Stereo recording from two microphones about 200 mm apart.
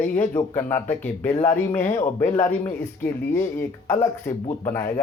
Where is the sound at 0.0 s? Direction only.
10° left (ahead or behind).